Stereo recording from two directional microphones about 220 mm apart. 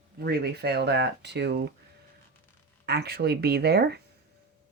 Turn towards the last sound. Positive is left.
turn(degrees=-45)  # may be behind; listen again after turning